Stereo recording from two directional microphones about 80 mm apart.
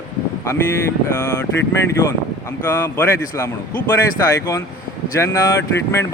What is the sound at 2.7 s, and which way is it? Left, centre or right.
Speech, left.